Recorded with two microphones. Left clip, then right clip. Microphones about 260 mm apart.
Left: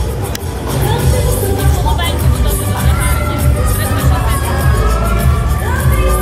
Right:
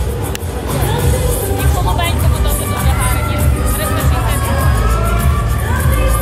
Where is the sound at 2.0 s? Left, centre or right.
Right.